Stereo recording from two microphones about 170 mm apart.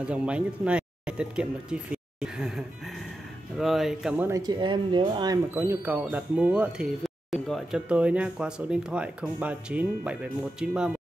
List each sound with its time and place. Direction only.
0.0 s speech: 5° right (ahead or behind)
4.3 s speech: 25° right (ahead or behind)
5.5 s speech: 10° right (ahead or behind)